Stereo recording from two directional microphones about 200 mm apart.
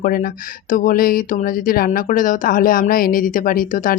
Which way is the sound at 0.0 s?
45° left (ahead or behind).